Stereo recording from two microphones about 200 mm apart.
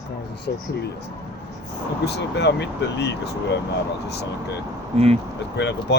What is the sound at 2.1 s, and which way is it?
Speech, 60° left (ahead or behind).